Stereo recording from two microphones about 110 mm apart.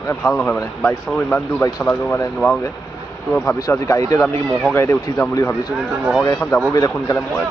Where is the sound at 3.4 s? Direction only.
30° left (ahead or behind).